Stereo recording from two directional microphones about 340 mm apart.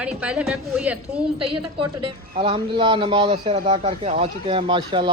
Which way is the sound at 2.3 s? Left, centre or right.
Centre.